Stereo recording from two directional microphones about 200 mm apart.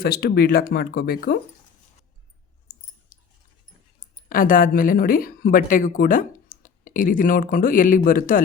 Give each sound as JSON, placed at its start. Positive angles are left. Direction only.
{"t": 0.0, "sound": "speech", "side_deg": 50}
{"t": 3.1, "sound": "a sound", "side_deg": 40}
{"t": 4.3, "sound": "speech", "side_deg": 45}